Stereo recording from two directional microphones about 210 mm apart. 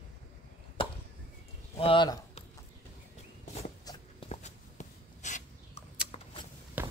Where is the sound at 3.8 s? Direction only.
30° left (ahead or behind).